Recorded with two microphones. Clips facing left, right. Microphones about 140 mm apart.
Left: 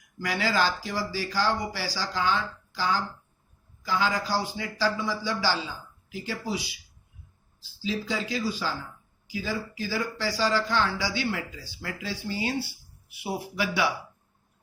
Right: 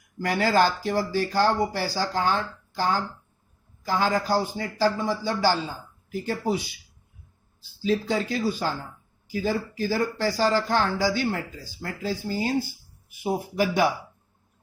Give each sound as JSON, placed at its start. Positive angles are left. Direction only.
{"t": 0.2, "sound": "speech", "side_deg": -50}